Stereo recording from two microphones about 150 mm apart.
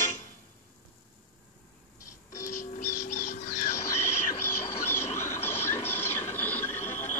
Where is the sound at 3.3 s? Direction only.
65° left (ahead or behind).